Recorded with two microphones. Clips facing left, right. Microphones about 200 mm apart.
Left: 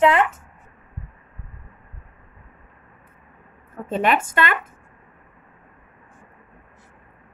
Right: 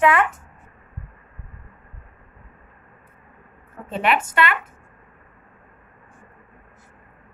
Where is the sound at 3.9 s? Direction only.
45° left (ahead or behind).